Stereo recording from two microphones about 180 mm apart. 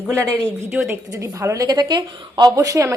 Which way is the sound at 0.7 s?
15° right (ahead or behind).